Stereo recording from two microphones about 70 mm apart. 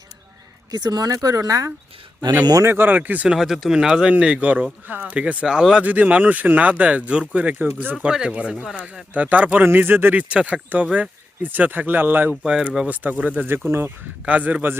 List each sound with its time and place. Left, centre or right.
0.7 s speech: right
2.6 s speech: right
3.2 s speech: centre
5.8 s speech: right
10.2 s speech: centre
12.3 s speech: centre; by 13.9 s right
14.3 s speech: right